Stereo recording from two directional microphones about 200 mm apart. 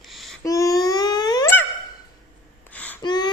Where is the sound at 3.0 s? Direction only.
20° left (ahead or behind).